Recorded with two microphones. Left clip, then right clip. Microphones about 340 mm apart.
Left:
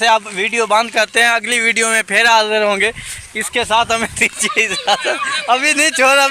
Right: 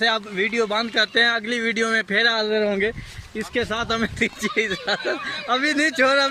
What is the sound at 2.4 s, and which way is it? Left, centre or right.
Speech, left.